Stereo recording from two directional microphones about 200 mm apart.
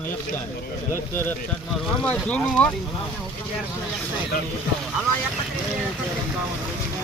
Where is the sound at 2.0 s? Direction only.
5° left (ahead or behind).